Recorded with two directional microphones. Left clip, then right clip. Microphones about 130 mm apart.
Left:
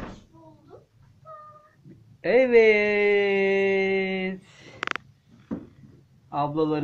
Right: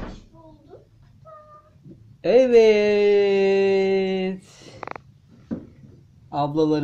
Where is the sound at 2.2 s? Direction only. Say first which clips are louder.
Right 3 dB; 30° right (ahead or behind).